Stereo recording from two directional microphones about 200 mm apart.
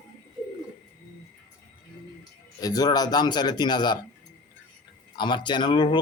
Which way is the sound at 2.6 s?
20° left (ahead or behind).